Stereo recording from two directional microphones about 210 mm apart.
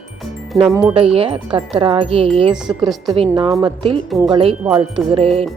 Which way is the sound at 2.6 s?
Centre (ahead or behind).